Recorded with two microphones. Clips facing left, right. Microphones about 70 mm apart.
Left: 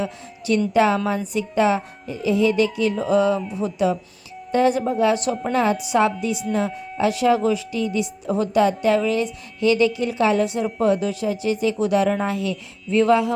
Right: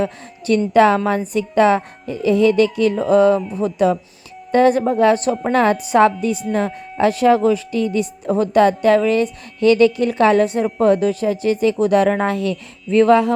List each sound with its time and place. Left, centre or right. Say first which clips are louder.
0.0 s a woman's voice: right 5 dB; right